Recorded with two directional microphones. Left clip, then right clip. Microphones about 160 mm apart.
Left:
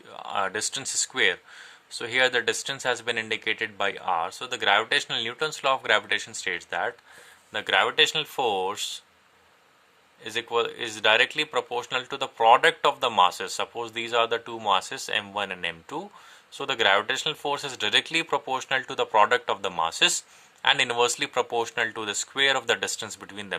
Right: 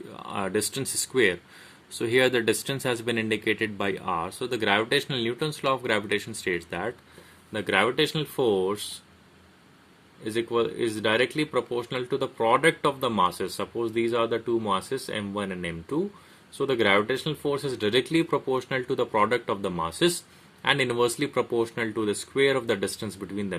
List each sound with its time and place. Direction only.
0.1 s speech: 25° left (ahead or behind)
10.2 s speech: 35° left (ahead or behind)